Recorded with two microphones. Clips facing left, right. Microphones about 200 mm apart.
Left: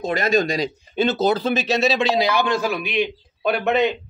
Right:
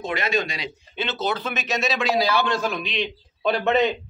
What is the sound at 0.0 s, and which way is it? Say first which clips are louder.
Speech: left 5 dB; 40° left (ahead or behind).